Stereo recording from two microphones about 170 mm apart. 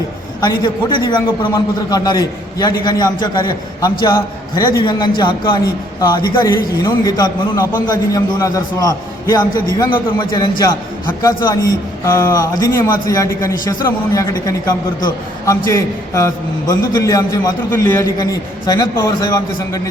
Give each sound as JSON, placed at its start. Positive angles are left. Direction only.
{"t": 0.4, "sound": "a man's voice", "side_deg": 25}